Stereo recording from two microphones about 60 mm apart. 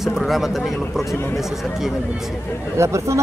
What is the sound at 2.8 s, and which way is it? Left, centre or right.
Speech, right.